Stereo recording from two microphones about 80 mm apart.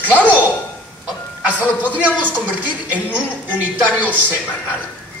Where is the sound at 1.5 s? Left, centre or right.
Centre.